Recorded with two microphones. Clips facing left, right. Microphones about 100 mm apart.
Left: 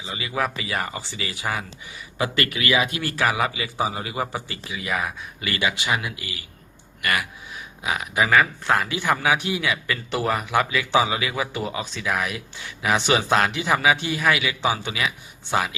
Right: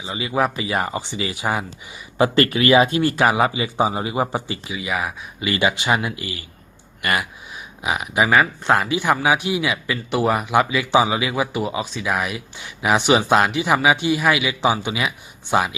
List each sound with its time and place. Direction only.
0.0 s speech: 25° right (ahead or behind)
2.1 s speech: 30° right (ahead or behind)
4.8 s a man's voice: 10° right (ahead or behind)
5.4 s a man's voice: 25° right (ahead or behind)